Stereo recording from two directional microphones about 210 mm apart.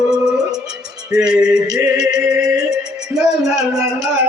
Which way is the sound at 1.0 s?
5° right (ahead or behind).